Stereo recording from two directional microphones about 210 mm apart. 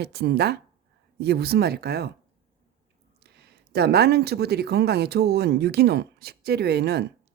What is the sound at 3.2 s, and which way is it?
Speech, 50° right (ahead or behind).